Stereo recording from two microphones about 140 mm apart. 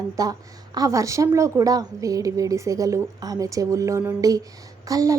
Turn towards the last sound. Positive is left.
turn(degrees=-25)  # may be behind; listen again after turning